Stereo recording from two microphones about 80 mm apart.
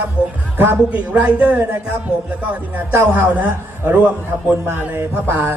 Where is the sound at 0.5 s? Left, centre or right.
Right.